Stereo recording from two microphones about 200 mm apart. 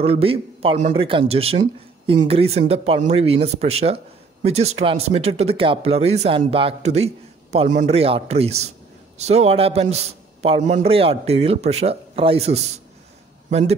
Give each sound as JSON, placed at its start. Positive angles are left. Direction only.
{"t": 0.0, "sound": "a man's voice", "side_deg": -30}